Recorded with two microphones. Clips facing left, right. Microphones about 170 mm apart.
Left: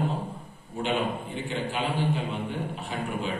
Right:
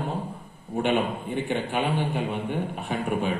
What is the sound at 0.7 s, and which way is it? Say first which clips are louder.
A man's voice: right 4 dB; 60° right (ahead or behind).